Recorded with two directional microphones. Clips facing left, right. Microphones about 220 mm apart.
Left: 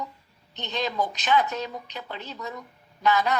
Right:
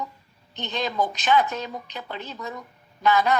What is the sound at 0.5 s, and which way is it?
A woman's voice, 50° right (ahead or behind).